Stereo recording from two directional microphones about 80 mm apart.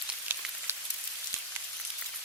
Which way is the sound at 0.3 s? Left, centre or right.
Right.